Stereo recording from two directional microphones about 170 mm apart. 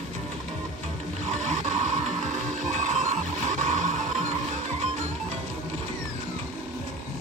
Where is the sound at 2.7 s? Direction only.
45° right (ahead or behind).